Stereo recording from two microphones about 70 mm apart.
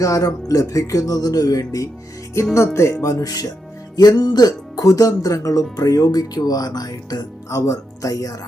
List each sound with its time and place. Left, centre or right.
0.0 s speech: left
2.7 s speech: left
7.5 s speech: left